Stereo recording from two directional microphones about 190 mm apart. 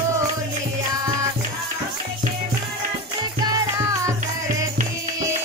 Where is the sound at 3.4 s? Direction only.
15° right (ahead or behind).